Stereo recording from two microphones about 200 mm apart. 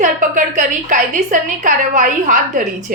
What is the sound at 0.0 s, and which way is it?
A woman's voice, 40° right (ahead or behind).